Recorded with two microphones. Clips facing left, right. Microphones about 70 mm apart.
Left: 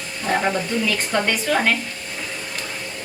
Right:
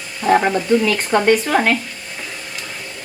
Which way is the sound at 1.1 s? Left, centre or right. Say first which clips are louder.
Right 7 dB; right.